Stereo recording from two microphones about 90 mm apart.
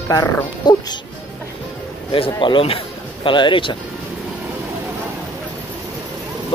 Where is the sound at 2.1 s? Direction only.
75° left (ahead or behind).